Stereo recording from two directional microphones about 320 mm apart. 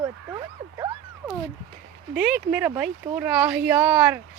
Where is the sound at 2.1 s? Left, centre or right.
Centre.